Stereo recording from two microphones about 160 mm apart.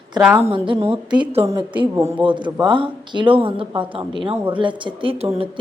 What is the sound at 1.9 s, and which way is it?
Speech, 15° right (ahead or behind).